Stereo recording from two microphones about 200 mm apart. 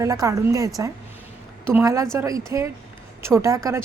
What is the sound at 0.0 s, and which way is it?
Speech, 15° right (ahead or behind).